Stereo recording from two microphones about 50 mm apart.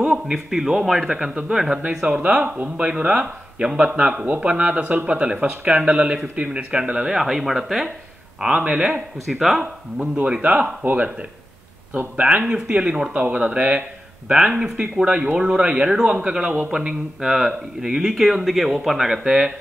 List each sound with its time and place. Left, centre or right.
0.3 s speech: centre
2.0 s a man's voice: right
7.2 s speech: centre
8.5 s a man's voice: right
9.2 s speech: centre
9.6 s a man's voice: right
12.2 s a man's voice: centre
13.1 s a man's voice: right; by 19.4 s centre